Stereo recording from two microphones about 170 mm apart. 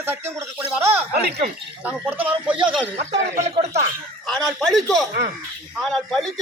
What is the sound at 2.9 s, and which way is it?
Speech, 35° right (ahead or behind).